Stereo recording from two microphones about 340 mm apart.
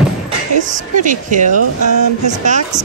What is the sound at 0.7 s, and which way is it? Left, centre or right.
Speech, right.